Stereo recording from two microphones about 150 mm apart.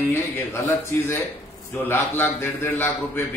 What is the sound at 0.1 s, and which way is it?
A man's voice, 15° left (ahead or behind).